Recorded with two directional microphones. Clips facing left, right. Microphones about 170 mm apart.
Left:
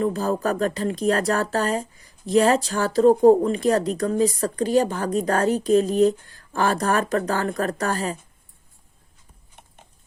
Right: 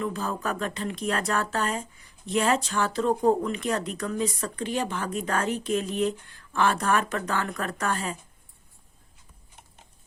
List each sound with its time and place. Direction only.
0.0 s speech: 40° left (ahead or behind)